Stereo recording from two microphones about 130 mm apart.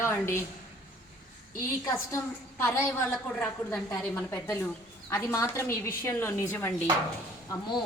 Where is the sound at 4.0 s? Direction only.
20° left (ahead or behind).